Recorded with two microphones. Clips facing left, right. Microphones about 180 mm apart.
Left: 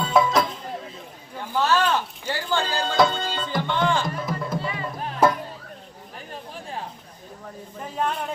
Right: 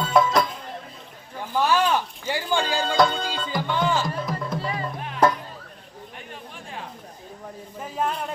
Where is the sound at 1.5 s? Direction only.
15° right (ahead or behind).